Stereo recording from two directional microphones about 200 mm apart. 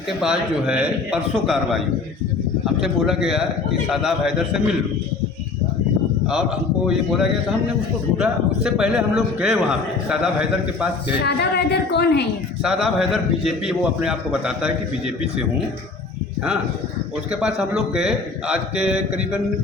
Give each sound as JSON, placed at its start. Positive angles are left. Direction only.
{"t": 0.2, "sound": "a man's voice", "side_deg": -5}
{"t": 2.8, "sound": "a man's voice", "side_deg": -5}
{"t": 6.8, "sound": "a man's voice", "side_deg": 0}
{"t": 11.2, "sound": "a woman's voice", "side_deg": 55}
{"t": 12.6, "sound": "a man's voice", "side_deg": -5}
{"t": 17.4, "sound": "a man's voice", "side_deg": -5}